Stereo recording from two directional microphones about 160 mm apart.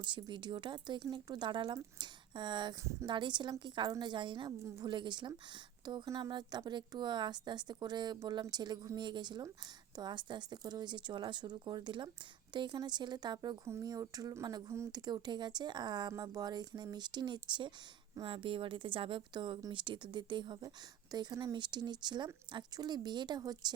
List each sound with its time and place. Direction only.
0.0 s a woman's voice: 30° right (ahead or behind)